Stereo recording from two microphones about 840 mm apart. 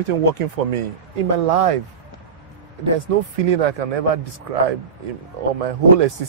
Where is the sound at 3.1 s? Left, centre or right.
Right.